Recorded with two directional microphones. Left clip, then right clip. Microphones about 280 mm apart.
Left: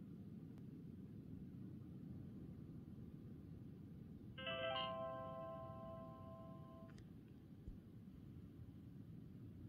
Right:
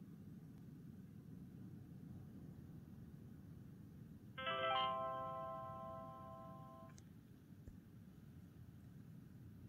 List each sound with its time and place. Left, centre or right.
4.4 s music: centre